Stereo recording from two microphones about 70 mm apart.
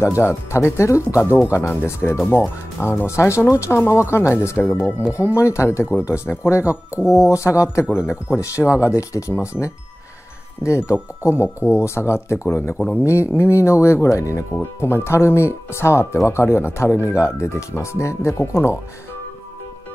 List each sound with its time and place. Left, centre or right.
0.0 s speech: left
14.6 s speech: left